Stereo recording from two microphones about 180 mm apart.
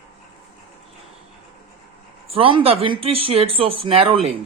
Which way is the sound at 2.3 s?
30° right (ahead or behind).